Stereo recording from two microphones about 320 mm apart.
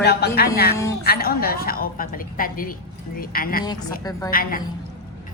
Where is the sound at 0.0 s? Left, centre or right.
Left.